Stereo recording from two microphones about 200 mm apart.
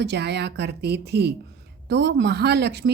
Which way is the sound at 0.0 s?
55° right (ahead or behind).